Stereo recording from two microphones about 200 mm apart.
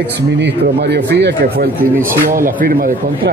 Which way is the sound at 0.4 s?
55° right (ahead or behind).